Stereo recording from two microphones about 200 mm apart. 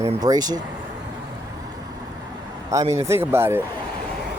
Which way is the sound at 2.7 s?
15° right (ahead or behind).